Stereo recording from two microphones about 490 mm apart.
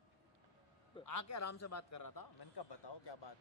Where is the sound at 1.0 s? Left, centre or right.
Left.